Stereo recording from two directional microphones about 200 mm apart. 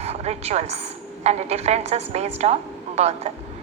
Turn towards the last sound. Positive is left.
turn(degrees=-30)  # may be behind; listen again after turning